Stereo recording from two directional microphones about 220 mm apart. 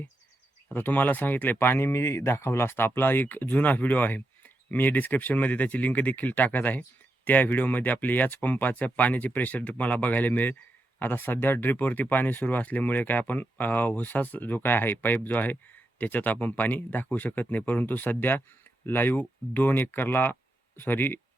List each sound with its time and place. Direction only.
0.7 s speech: 10° left (ahead or behind)